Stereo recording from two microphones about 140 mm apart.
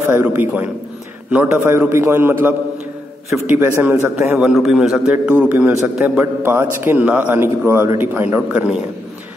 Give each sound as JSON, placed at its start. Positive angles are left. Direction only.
{"t": 0.0, "sound": "a man's voice", "side_deg": -15}